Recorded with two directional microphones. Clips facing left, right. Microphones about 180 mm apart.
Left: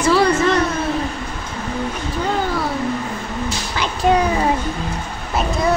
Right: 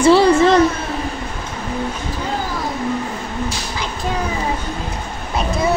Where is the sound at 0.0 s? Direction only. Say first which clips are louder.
Right 4 dB; 30° right (ahead or behind).